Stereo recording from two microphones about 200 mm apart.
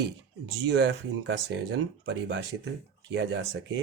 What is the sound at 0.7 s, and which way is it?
Speech, 60° right (ahead or behind).